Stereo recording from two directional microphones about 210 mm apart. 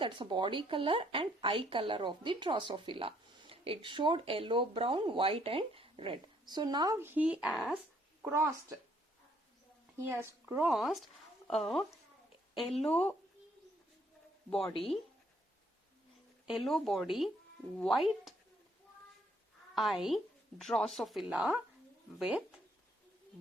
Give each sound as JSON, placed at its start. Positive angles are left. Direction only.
{"t": 0.0, "sound": "a woman's voice", "side_deg": -20}
{"t": 10.1, "sound": "speech", "side_deg": -10}
{"t": 16.5, "sound": "speech", "side_deg": 0}
{"t": 19.7, "sound": "speech", "side_deg": 0}